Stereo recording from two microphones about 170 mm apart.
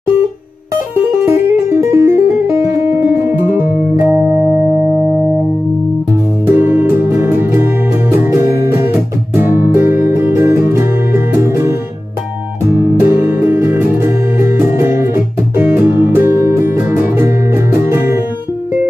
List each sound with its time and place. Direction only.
1.2 s music: 15° right (ahead or behind)
6.4 s music: 10° right (ahead or behind)